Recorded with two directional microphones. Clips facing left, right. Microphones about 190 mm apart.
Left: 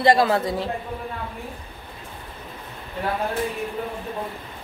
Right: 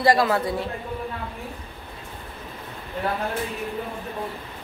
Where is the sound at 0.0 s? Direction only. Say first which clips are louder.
Left 2 dB; 25° left (ahead or behind).